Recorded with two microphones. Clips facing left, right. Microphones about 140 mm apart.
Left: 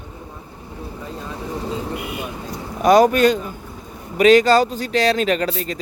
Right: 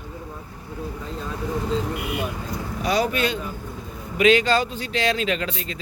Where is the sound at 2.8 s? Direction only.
50° left (ahead or behind).